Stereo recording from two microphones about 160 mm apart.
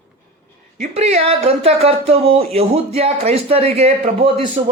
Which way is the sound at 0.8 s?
40° right (ahead or behind).